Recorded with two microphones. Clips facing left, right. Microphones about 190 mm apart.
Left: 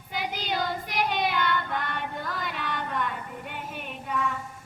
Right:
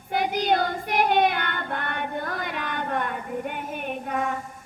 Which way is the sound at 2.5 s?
50° right (ahead or behind).